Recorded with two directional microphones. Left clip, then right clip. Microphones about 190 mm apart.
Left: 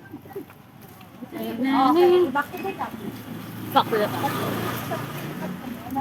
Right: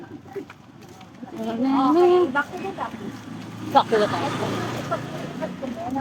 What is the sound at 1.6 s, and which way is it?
Speech, 50° right (ahead or behind).